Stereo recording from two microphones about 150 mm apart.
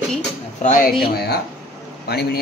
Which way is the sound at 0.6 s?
80° left.